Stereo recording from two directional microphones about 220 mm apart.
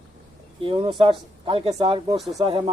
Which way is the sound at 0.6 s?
25° right (ahead or behind).